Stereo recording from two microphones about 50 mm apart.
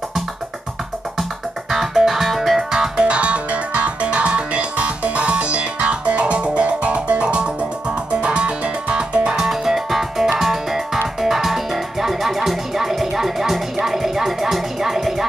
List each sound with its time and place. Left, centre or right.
1.7 s music: centre